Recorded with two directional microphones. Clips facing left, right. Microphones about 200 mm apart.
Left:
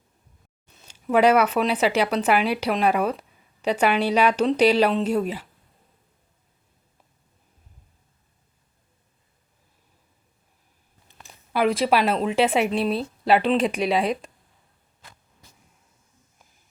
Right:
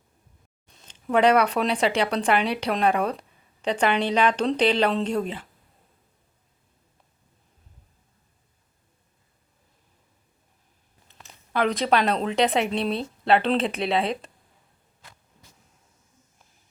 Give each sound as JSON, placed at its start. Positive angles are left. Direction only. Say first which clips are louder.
{"t": 0.7, "sound": "speech", "louder": "left 2 dB", "side_deg": 5}
{"t": 11.1, "sound": "a woman's voice", "louder": "left 1 dB", "side_deg": 10}
{"t": 13.8, "sound": "speech", "louder": "left 2 dB", "side_deg": -30}